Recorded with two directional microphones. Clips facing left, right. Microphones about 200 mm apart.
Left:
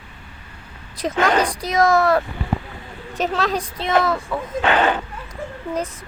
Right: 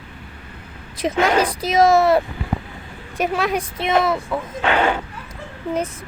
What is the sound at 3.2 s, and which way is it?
A woman's voice, 10° right (ahead or behind).